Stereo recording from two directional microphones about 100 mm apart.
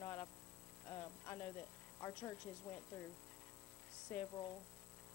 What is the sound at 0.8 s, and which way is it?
Speech, 20° left (ahead or behind).